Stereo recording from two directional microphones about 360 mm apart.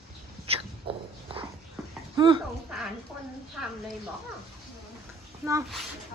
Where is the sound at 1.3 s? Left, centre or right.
Centre.